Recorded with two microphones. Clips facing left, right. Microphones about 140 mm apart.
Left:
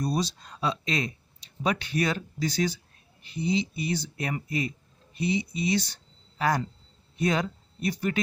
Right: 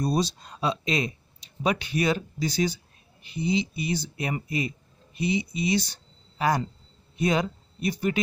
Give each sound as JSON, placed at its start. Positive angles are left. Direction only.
{"t": 0.0, "sound": "speech", "side_deg": -25}